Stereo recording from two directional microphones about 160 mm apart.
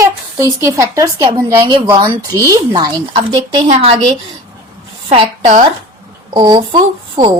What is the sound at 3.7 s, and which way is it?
Speech, 35° right (ahead or behind).